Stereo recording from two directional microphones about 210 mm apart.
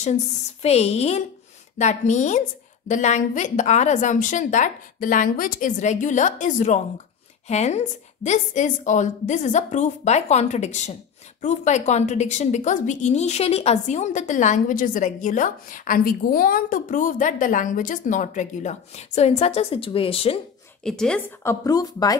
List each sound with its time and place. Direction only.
0.6 s a woman's voice: 30° left (ahead or behind)
20.8 s a woman's voice: 5° left (ahead or behind)
21.5 s speech: 15° left (ahead or behind)